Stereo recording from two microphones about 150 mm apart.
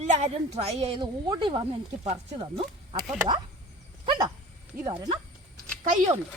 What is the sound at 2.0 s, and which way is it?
Speech, 45° right (ahead or behind).